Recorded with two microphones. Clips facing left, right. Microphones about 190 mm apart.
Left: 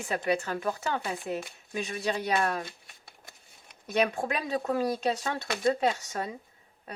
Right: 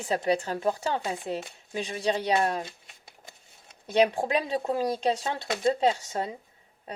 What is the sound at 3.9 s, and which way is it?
Speech, 30° right (ahead or behind).